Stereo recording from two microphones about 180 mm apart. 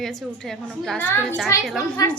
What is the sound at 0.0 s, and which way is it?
A woman's voice, centre (ahead or behind).